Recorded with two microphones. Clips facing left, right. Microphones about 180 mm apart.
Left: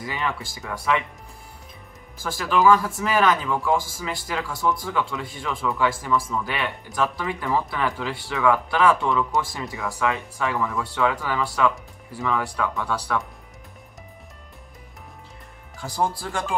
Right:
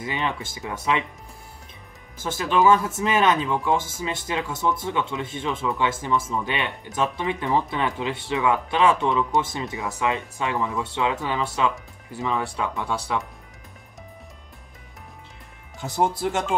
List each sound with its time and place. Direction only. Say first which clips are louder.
0.0 s speech: right 1 dB; 20° right (ahead or behind)
2.1 s speech: right 1 dB; 20° right (ahead or behind)
15.8 s speech: right 3 dB; 20° right (ahead or behind)